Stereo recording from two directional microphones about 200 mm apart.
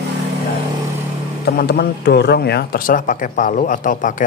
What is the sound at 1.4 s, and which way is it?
Speech, 55° left (ahead or behind).